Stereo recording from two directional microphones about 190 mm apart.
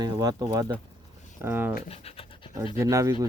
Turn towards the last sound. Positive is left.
turn(degrees=-20)  # may be behind; listen again after turning